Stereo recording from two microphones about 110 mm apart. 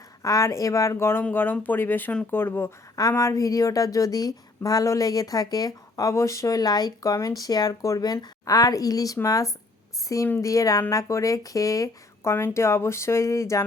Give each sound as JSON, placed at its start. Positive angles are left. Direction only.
{"t": 0.2, "sound": "speech", "side_deg": 30}